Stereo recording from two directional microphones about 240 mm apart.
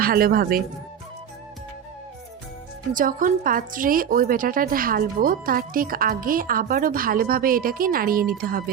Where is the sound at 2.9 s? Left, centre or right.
Right.